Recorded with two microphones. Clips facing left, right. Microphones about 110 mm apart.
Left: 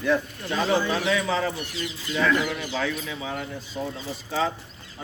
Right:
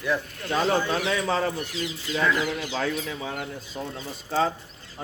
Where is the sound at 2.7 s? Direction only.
40° right (ahead or behind).